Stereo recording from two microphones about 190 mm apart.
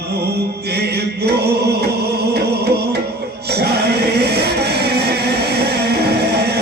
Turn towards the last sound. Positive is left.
turn(degrees=-60)  # may be behind; listen again after turning